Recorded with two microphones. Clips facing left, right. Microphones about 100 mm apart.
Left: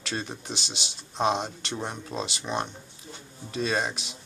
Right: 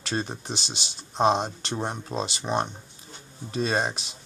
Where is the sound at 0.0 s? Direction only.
35° right (ahead or behind).